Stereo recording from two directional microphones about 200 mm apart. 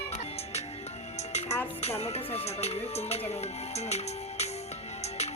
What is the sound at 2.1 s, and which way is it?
Music, 30° left (ahead or behind).